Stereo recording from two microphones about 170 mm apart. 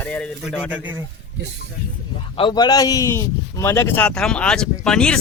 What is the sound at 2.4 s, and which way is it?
A man's voice, 25° left (ahead or behind).